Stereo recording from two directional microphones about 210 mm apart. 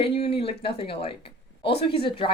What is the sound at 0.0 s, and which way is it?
Speech, 25° left (ahead or behind).